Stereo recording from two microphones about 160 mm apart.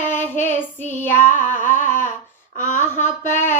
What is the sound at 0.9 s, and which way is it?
Female singing, 15° left (ahead or behind).